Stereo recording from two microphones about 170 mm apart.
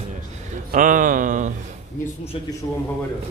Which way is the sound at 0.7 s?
50° right (ahead or behind).